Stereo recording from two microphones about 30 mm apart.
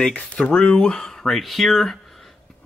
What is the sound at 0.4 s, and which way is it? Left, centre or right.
Speech, left.